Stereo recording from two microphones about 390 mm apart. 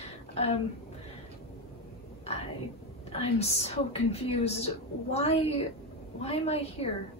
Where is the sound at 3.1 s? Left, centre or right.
Centre.